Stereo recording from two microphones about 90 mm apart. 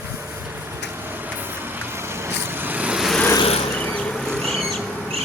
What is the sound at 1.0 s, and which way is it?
Vehicle, 20° right (ahead or behind).